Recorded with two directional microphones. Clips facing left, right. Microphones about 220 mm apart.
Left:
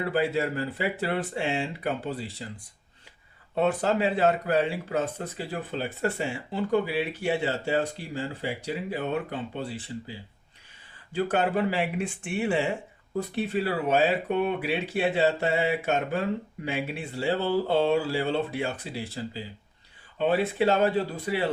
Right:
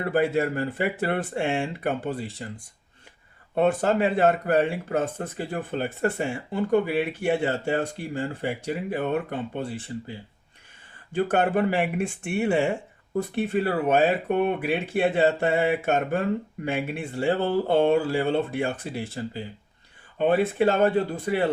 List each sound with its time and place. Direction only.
0.0 s speech: 50° right (ahead or behind)
3.5 s speech: 50° right (ahead or behind)
11.1 s speech: 50° right (ahead or behind)